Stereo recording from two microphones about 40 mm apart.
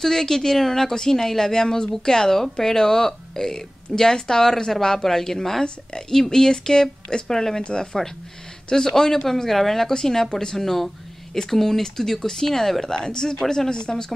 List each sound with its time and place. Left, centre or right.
0.0 s speech: centre
10.6 s speech: centre
12.9 s speech: centre